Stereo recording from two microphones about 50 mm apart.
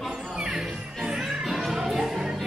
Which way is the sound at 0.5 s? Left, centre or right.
Centre.